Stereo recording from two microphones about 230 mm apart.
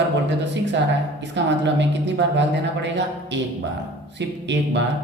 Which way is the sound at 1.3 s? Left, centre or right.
Right.